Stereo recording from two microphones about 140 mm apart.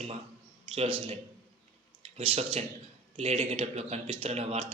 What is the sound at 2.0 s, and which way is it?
A man's voice, 45° right (ahead or behind).